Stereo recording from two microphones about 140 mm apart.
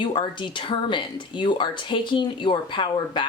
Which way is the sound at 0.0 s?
35° left (ahead or behind).